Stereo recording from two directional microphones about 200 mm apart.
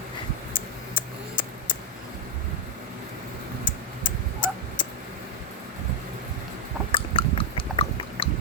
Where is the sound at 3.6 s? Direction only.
25° left (ahead or behind).